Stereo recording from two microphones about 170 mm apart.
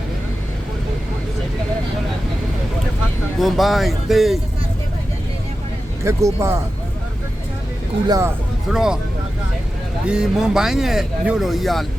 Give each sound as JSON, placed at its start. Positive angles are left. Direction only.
{"t": 3.4, "sound": "speech", "side_deg": 0}
{"t": 6.1, "sound": "speech", "side_deg": -15}
{"t": 8.0, "sound": "speech", "side_deg": -20}
{"t": 8.7, "sound": "speech", "side_deg": -5}
{"t": 10.1, "sound": "speech", "side_deg": -5}